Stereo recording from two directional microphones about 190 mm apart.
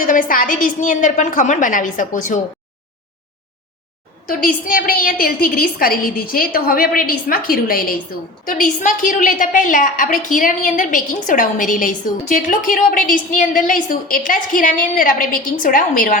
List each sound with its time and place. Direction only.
0.0 s a woman's voice: 45° left (ahead or behind)
4.3 s a woman's voice: 50° left (ahead or behind)